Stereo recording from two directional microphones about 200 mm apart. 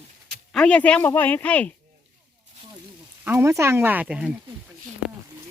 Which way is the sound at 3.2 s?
15° right (ahead or behind).